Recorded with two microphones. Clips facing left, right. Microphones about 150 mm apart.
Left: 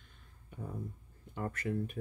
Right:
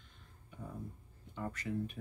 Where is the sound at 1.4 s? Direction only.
55° left (ahead or behind).